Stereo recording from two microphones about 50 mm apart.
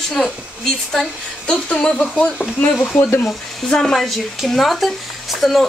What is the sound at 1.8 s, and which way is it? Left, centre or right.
Speech, centre.